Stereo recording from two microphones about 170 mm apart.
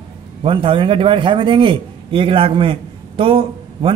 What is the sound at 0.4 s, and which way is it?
A man's voice, 30° right (ahead or behind).